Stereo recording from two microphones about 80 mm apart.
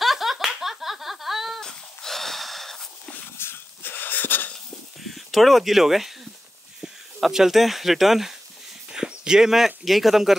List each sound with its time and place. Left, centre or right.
0.0 s a sound: centre
3.3 s wheeze: left
5.0 s speech: centre